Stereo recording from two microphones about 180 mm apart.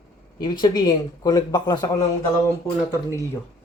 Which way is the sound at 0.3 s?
25° left (ahead or behind).